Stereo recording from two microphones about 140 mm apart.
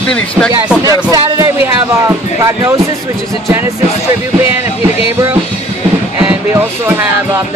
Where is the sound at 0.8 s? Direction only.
25° right (ahead or behind).